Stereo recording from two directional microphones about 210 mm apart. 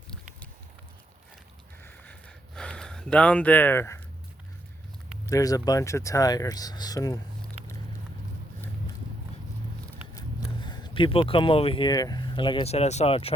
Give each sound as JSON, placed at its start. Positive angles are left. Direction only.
{"t": 1.8, "sound": "a sound", "side_deg": 5}
{"t": 5.2, "sound": "speech", "side_deg": 15}
{"t": 10.6, "sound": "speech", "side_deg": 20}